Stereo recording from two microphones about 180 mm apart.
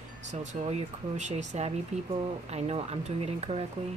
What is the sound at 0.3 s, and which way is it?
Speech, 40° right (ahead or behind).